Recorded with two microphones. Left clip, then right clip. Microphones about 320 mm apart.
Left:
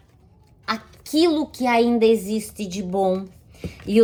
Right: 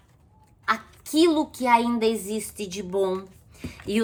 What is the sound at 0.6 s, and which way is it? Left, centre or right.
Speech, centre.